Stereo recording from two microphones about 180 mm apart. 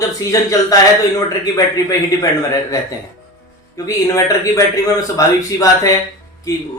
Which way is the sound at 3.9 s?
15° left (ahead or behind).